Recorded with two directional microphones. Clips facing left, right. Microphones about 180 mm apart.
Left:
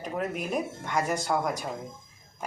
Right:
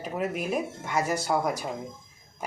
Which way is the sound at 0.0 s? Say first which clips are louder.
Right 1 dB; 5° right (ahead or behind).